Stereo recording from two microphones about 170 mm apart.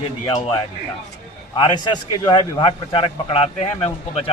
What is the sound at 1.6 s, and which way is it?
A man's voice, 25° left (ahead or behind).